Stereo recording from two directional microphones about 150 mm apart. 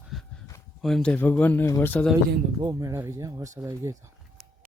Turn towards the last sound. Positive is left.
turn(degrees=-20)  # may be behind; listen again after turning